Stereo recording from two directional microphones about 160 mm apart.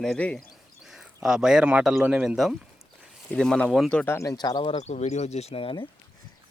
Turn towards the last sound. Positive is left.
turn(degrees=35)  # may be behind; listen again after turning